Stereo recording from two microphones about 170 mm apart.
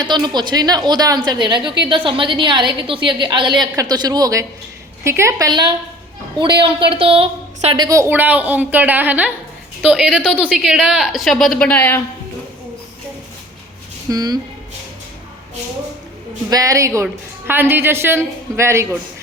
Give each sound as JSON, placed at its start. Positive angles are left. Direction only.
{"t": 0.0, "sound": "a woman's voice", "side_deg": -25}
{"t": 7.9, "sound": "a woman's voice", "side_deg": -15}
{"t": 14.1, "sound": "a woman's voice", "side_deg": -20}
{"t": 16.5, "sound": "a woman's voice", "side_deg": -20}